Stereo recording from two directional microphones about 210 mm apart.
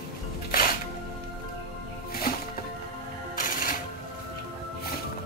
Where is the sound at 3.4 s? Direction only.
40° left (ahead or behind).